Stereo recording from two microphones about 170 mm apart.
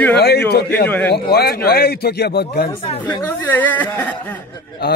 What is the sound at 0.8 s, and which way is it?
Speech, 10° left (ahead or behind).